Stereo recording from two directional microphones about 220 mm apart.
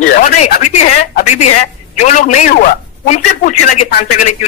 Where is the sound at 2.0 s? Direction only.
30° left (ahead or behind).